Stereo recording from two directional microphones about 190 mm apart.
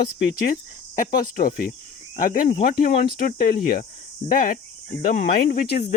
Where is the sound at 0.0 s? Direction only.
50° left (ahead or behind).